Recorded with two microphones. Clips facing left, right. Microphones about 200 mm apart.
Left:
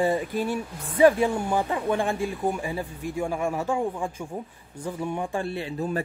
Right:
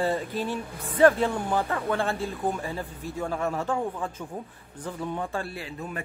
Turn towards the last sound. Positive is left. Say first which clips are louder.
# left 7 dB
turn(degrees=30)  # may be behind; listen again after turning